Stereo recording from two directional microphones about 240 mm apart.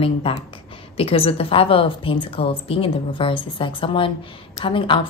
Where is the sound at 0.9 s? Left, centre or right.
Left.